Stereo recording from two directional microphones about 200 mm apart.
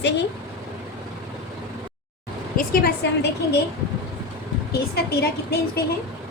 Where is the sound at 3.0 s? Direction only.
55° left (ahead or behind).